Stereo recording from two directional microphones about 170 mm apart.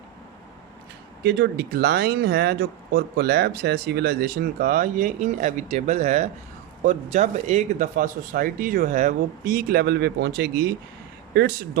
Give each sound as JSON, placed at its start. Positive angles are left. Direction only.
{"t": 1.2, "sound": "speech", "side_deg": -80}